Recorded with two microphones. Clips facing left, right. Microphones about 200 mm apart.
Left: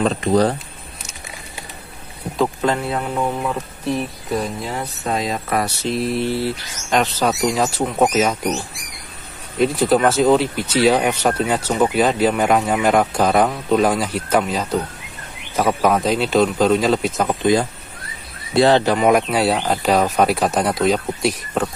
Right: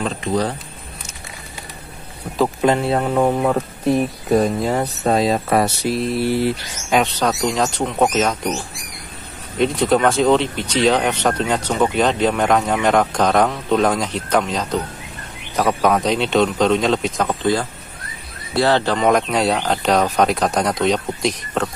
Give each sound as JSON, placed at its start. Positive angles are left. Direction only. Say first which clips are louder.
{"t": 0.0, "sound": "speech", "louder": "left 5 dB", "side_deg": 40}
{"t": 2.9, "sound": "speech", "louder": "right 5 dB", "side_deg": -45}
{"t": 5.9, "sound": "speech", "louder": "right 1 dB", "side_deg": 0}
{"t": 6.2, "sound": "mantra", "louder": "right 3 dB", "side_deg": -15}
{"t": 7.0, "sound": "speech", "louder": "left 1 dB", "side_deg": 0}
{"t": 9.6, "sound": "speech", "louder": "even", "side_deg": 0}
{"t": 17.3, "sound": "speech", "louder": "left 5 dB", "side_deg": 15}